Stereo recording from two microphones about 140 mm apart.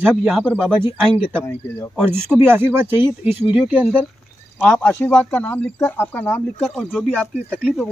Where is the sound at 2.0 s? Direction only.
15° right (ahead or behind).